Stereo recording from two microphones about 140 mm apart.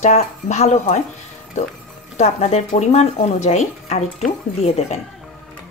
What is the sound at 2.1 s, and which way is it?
Speech, 55° left (ahead or behind).